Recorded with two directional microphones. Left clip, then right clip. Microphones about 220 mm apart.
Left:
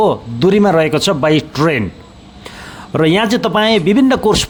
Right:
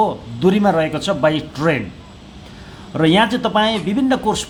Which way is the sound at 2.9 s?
35° left (ahead or behind).